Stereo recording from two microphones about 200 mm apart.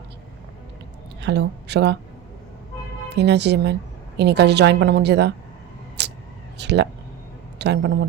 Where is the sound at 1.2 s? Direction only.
60° right (ahead or behind).